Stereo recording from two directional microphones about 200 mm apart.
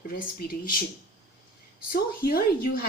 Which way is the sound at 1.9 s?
45° left (ahead or behind).